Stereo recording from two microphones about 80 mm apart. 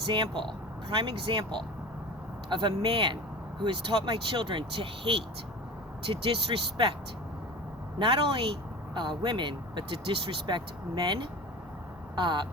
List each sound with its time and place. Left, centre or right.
0.1 s speech: right
7.9 s speech: right
9.0 s speech: right